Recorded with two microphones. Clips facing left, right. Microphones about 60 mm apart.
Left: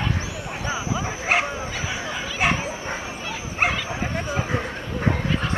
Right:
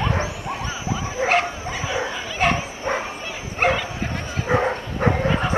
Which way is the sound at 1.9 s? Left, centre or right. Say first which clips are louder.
Right 3 dB; centre.